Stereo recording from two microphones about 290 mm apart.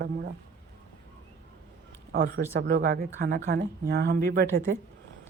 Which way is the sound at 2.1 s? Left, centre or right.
Right.